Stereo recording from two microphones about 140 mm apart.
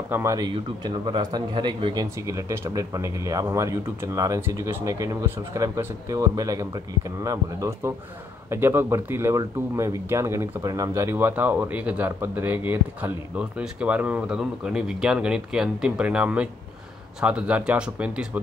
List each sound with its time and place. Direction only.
0.1 s speech: 20° right (ahead or behind)
0.5 s speech: 35° right (ahead or behind)
2.1 s speech: 20° right (ahead or behind)